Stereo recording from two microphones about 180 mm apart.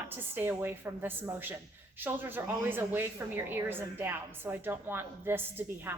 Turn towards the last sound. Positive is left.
turn(degrees=-10)  # may be behind; listen again after turning